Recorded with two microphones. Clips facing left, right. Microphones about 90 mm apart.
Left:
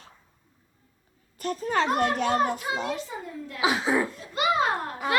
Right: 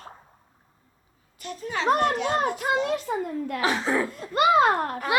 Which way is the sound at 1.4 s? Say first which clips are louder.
Left 5 dB; 40° left (ahead or behind).